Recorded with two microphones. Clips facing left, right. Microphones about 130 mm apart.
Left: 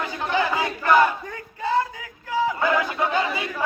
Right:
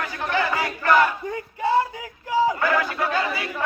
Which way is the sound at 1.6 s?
15° right (ahead or behind).